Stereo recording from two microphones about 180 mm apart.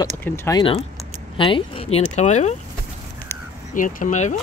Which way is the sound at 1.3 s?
30° left (ahead or behind).